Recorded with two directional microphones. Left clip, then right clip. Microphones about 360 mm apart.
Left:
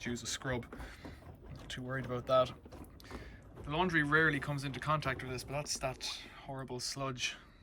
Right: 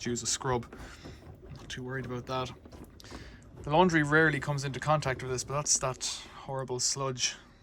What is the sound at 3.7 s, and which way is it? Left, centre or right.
Speech, centre.